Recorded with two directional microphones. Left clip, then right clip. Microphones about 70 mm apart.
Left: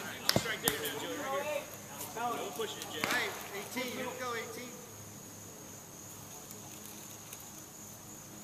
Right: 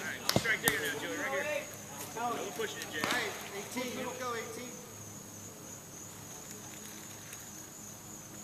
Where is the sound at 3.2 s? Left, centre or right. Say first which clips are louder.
Even; left.